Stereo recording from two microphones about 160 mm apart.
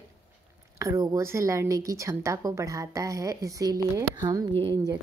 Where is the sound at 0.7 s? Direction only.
20° right (ahead or behind).